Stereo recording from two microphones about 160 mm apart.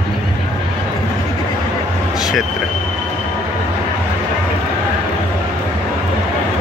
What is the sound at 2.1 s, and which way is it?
Vehicle, centre (ahead or behind).